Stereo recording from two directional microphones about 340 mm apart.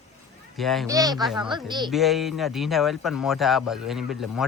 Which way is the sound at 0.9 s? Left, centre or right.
Centre.